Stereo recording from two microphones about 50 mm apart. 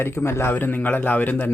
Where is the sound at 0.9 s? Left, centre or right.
Left.